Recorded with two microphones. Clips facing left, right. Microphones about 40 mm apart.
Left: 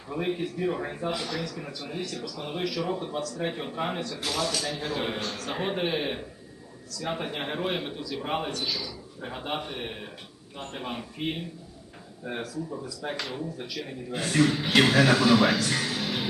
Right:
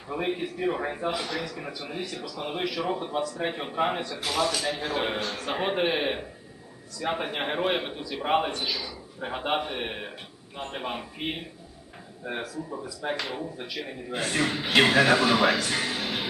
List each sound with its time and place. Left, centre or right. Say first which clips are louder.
0.1 s a man's voice: even; centre
10.6 s speech: right 2 dB; centre